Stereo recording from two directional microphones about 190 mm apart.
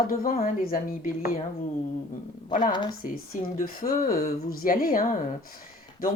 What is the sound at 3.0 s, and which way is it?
Speech, 45° left (ahead or behind).